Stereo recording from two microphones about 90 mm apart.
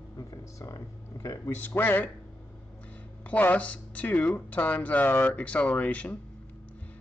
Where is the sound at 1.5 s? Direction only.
20° left (ahead or behind).